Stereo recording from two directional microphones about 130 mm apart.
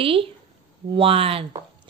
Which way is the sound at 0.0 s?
45° right (ahead or behind).